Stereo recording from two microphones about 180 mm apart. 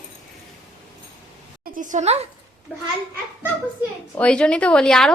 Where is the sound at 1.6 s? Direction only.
50° right (ahead or behind).